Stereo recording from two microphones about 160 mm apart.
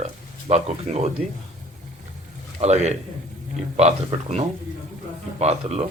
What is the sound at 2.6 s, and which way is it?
Speech, 45° right (ahead or behind).